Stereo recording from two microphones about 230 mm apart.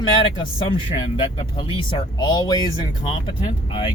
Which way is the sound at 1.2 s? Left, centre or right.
Left.